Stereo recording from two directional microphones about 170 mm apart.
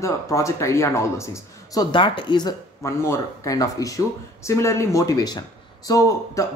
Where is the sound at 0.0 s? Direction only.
20° left (ahead or behind).